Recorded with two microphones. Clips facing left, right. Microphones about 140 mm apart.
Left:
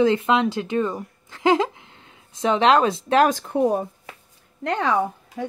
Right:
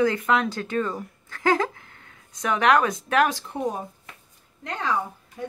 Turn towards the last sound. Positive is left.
turn(degrees=70)  # may be behind; listen again after turning